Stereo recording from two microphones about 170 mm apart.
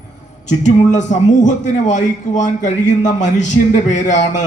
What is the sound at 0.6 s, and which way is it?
A man's voice, 45° left (ahead or behind).